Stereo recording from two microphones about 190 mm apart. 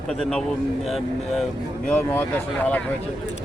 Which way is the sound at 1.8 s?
10° left (ahead or behind).